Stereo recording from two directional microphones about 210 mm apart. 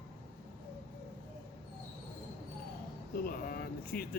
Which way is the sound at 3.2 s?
45° left (ahead or behind).